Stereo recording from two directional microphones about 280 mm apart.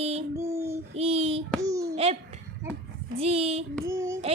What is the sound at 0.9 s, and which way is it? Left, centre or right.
Speech, right.